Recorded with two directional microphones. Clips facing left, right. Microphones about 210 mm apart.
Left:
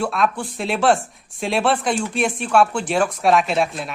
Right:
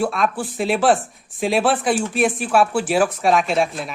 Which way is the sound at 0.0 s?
Centre (ahead or behind).